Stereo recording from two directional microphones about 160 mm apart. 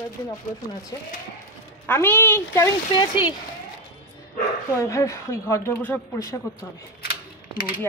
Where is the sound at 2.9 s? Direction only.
30° left (ahead or behind).